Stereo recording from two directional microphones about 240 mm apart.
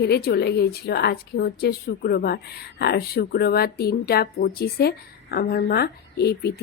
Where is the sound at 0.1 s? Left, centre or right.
Left.